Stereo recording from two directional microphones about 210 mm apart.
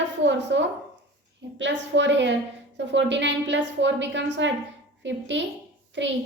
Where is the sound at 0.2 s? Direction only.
55° right (ahead or behind).